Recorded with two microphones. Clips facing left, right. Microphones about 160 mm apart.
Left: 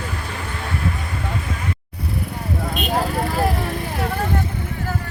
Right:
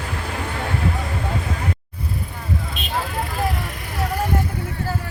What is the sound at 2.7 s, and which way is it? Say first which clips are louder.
Vehicle: left 7 dB; 40° left (ahead or behind).